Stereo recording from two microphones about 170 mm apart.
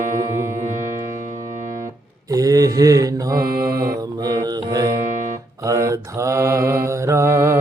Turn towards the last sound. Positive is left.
turn(degrees=-15)  # may be behind; listen again after turning